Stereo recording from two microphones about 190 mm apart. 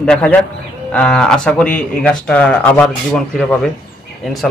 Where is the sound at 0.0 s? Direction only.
5° left (ahead or behind).